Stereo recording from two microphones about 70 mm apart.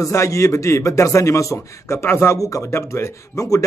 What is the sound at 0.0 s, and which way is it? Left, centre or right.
Speech, left.